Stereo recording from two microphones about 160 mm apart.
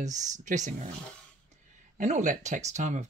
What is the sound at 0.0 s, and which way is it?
Speech, 50° right (ahead or behind).